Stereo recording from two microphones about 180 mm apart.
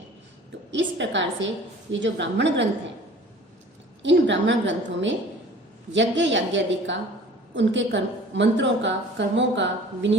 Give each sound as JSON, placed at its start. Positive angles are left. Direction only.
{"t": 0.7, "sound": "a woman's voice", "side_deg": -90}
{"t": 4.0, "sound": "a woman's voice", "side_deg": -85}